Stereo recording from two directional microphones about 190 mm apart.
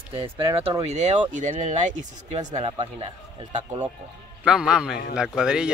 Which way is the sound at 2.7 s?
25° right (ahead or behind).